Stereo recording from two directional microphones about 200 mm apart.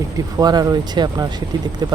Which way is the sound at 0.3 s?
20° right (ahead or behind).